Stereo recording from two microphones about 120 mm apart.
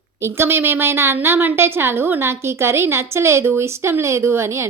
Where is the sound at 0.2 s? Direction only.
20° right (ahead or behind).